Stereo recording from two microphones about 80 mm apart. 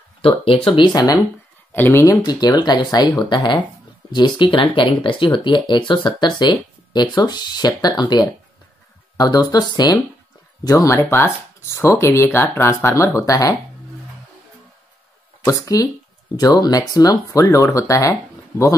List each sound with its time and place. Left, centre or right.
0.7 s speech: left
0.9 s speech: left
1.7 s speech: left
2.0 s speech: left
15.4 s speech: left